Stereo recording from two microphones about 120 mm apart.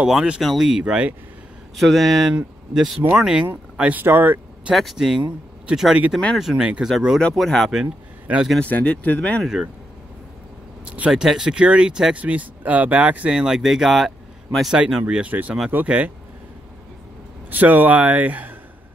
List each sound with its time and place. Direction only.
0.0 s speech: 5° right (ahead or behind)
4.7 s speech: centre (ahead or behind)
7.2 s speech: 5° left (ahead or behind)
8.5 s speech: 10° left (ahead or behind)
10.9 s speech: 10° right (ahead or behind)
17.5 s speech: 15° right (ahead or behind)